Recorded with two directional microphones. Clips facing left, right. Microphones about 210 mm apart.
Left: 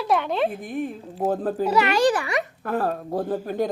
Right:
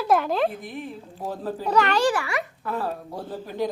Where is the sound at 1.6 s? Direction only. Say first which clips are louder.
Left 1 dB; 5° left (ahead or behind).